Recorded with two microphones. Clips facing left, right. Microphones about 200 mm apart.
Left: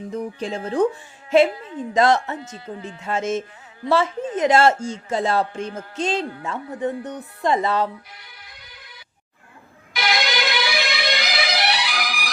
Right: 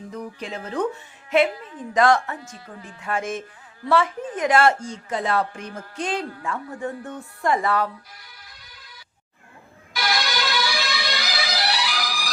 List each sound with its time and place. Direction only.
0.1 s a man's voice: 25° left (ahead or behind)
9.9 s music: 20° left (ahead or behind)